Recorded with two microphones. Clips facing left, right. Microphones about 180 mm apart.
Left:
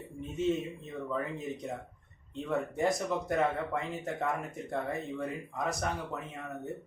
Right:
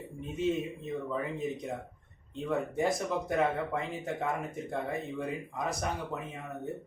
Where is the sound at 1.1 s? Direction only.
Centre (ahead or behind).